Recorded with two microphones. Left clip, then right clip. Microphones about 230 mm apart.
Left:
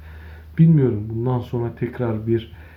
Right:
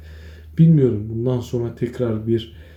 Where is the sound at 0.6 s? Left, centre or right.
Centre.